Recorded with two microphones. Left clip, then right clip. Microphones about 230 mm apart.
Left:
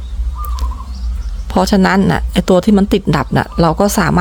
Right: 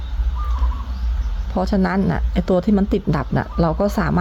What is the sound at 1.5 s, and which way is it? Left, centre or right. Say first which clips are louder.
Speech: left 8 dB; left.